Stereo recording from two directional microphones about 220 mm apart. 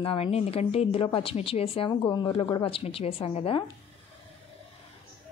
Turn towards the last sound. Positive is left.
turn(degrees=25)  # may be behind; listen again after turning